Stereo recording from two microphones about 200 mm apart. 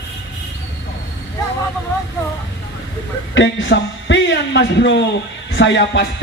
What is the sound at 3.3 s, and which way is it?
A man's voice, 65° left (ahead or behind).